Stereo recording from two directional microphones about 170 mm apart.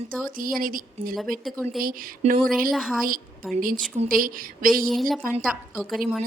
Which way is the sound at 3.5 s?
55° right (ahead or behind).